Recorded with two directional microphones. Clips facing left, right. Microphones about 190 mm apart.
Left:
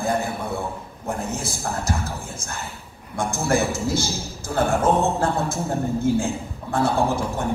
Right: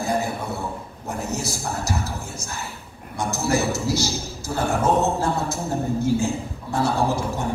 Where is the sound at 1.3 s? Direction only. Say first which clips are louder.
Even; 55° left (ahead or behind).